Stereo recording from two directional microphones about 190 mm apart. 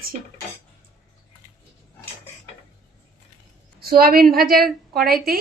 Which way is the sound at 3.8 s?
50° right (ahead or behind).